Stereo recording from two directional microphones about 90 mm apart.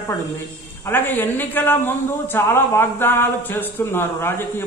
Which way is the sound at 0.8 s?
25° left (ahead or behind).